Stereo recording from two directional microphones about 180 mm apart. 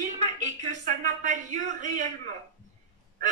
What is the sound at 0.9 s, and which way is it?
Speech, 45° right (ahead or behind).